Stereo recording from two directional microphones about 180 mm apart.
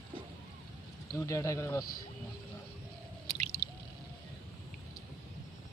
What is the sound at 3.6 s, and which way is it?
Drip, 25° left (ahead or behind).